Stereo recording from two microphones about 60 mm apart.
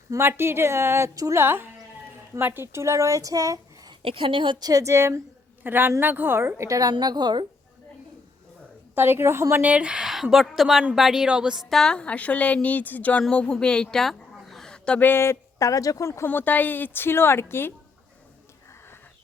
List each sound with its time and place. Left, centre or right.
0.2 s a woman's voice: right
1.1 s a woman's voice: right
1.4 s a woman's voice: right
4.6 s a woman's voice: right
5.6 s a woman's voice: right
6.6 s a woman's voice: right
9.0 s a woman's voice: right
9.6 s a woman's voice: right
11.6 s a woman's voice: centre
14.0 s chicken: centre
14.9 s a woman's voice: left
15.5 s speech: left
16.2 s a woman's voice: left